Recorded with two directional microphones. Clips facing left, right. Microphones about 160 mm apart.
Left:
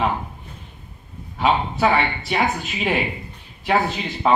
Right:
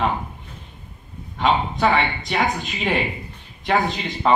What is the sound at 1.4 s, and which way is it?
Speech, 5° left (ahead or behind).